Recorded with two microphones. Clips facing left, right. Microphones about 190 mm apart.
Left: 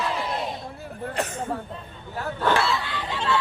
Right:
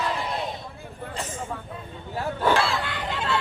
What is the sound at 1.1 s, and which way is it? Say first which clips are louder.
Speech: left 4 dB; 65° left (ahead or behind).